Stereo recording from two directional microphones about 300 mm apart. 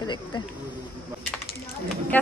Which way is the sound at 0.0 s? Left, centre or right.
Centre.